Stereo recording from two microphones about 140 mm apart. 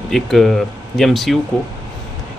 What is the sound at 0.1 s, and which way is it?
Speech, centre (ahead or behind).